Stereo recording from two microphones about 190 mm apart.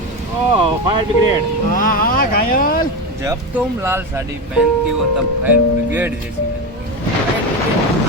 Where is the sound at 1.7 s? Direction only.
45° left (ahead or behind).